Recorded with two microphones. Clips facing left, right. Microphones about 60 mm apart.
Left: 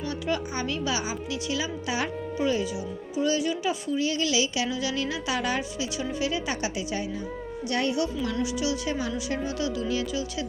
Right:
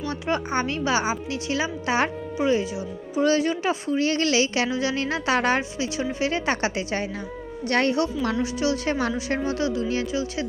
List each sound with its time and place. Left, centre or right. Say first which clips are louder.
0.3 s a woman's voice: right 5 dB; right
2.4 s speech: right 4 dB; right
3.2 s a woman's voice: right 5 dB; right
4.7 s a woman's voice: right 4 dB; right
6.3 s a woman's voice: right 5 dB; right
8.4 s a woman's voice: right 3 dB; right
9.4 s a woman's voice: right 4 dB; right